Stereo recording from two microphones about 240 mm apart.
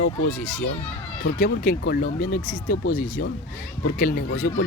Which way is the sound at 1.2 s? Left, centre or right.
Left.